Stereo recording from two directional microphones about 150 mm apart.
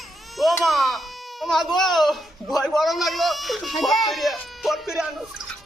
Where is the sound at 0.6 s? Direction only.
Centre (ahead or behind).